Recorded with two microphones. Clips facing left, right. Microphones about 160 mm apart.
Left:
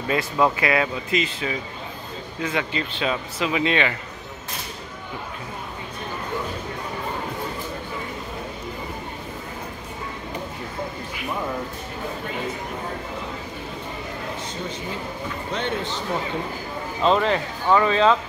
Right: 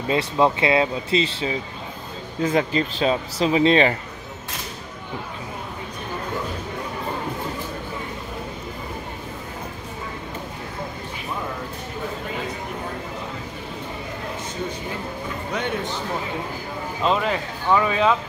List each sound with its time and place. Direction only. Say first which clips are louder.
0.1 s speech: right 2 dB; 25° right (ahead or behind)
17.0 s speech: left 3 dB; 5° right (ahead or behind)